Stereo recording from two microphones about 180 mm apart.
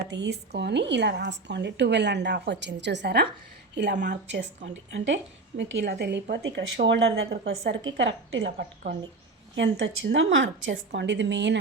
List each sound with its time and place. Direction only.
0.1 s a woman's voice: 70° right (ahead or behind)
4.4 s speech: 40° right (ahead or behind)
4.9 s a woman's voice: 85° right; by 7.5 s 65° right (ahead or behind)
7.6 s a woman's voice: 90° right
9.6 s speech: 90° right